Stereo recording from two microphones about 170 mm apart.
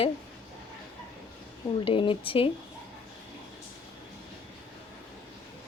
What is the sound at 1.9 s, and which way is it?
Speech, 30° left (ahead or behind).